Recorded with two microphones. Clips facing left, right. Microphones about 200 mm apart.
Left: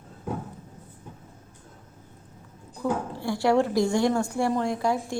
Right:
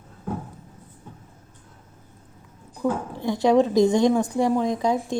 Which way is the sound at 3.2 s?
20° right (ahead or behind).